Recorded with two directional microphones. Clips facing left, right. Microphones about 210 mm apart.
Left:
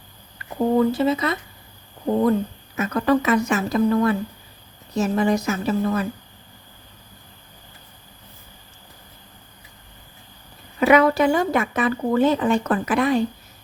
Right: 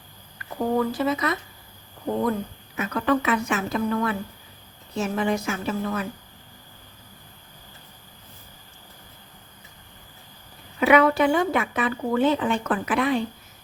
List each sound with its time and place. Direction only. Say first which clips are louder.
0.8 s speech: left 5 dB; 25° left (ahead or behind)
2.7 s speech: left 4 dB; 40° left (ahead or behind)
10.8 s speech: left 2 dB; 40° left (ahead or behind)